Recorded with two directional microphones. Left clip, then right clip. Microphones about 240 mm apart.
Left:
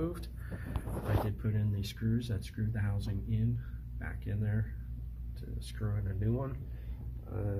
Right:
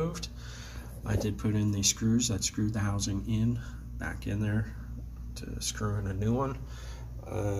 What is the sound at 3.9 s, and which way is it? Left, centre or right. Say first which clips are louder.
Speech: right 7 dB; centre.